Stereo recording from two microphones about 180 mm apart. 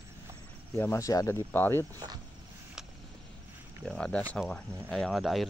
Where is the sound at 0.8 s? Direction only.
15° left (ahead or behind).